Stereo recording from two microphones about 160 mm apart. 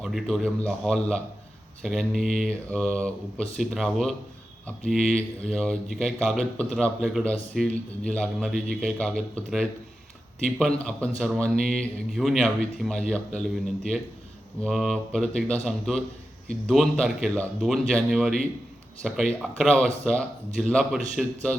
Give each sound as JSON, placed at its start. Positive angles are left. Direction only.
{"t": 0.0, "sound": "a man's voice", "side_deg": 0}